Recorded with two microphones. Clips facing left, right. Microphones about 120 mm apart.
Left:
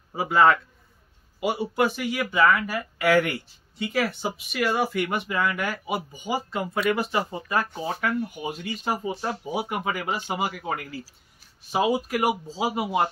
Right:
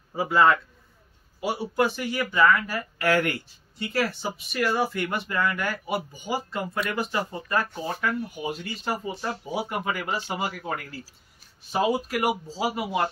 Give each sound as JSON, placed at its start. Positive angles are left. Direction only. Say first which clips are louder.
{"t": 0.1, "sound": "speech", "louder": "left 1 dB", "side_deg": 15}
{"t": 12.4, "sound": "speech", "louder": "left 1 dB", "side_deg": 20}